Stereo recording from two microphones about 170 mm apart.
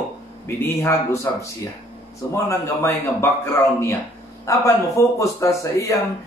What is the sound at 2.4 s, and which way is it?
Speech, 15° left (ahead or behind).